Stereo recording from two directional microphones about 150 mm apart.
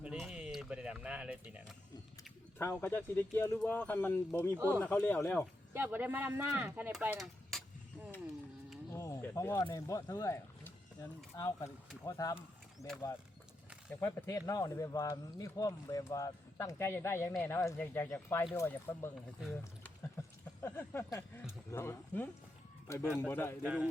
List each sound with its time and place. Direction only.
0.0 s a sound: 5° right (ahead or behind)
2.6 s speech: 15° left (ahead or behind)
4.5 s speech: 15° right (ahead or behind)
4.8 s speech: 10° left (ahead or behind)
5.7 s speech: 10° right (ahead or behind)
7.5 s a sound: centre (ahead or behind)
8.9 s a sound: 20° left (ahead or behind)
9.7 s speech: 20° left (ahead or behind)
20.6 s speech: 15° left (ahead or behind)
23.6 s speech: 10° right (ahead or behind)